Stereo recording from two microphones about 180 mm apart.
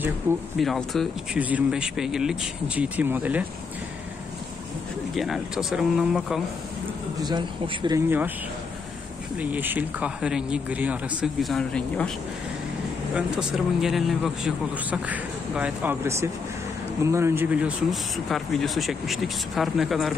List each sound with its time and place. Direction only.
0.3 s a man's voice: 15° right (ahead or behind)
0.6 s a man's voice: centre (ahead or behind)
5.1 s speech: centre (ahead or behind)
7.2 s speech: 25° right (ahead or behind)
9.4 s a man's voice: 10° right (ahead or behind)
13.1 s speech: 5° right (ahead or behind)